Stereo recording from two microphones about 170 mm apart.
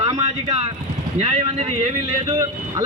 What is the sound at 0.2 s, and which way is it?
A man's voice, 35° right (ahead or behind).